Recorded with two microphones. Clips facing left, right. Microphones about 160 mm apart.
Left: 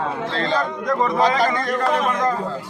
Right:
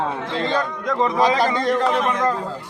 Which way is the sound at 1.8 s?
Centre (ahead or behind).